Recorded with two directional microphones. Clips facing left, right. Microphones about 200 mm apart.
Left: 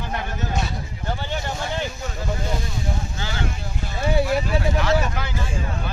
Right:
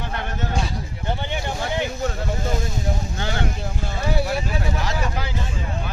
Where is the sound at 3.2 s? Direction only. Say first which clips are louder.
Right 4 dB; 55° right (ahead or behind).